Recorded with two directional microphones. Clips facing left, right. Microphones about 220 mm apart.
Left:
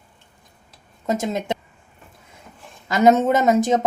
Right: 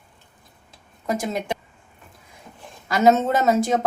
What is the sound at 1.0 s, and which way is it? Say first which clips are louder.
Speech: left 2 dB; 25° left (ahead or behind).